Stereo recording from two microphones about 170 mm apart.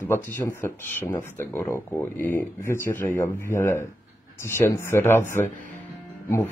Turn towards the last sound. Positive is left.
turn(degrees=15)  # may be behind; listen again after turning